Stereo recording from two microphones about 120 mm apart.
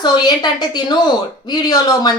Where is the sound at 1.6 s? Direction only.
35° left (ahead or behind).